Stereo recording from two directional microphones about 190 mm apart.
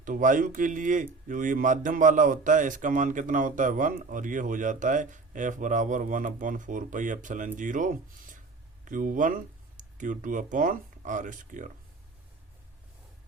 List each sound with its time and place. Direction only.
0.0 s speech: 45° right (ahead or behind)